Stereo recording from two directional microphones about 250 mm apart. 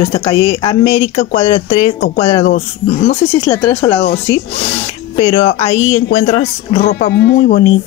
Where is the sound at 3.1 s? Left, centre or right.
Left.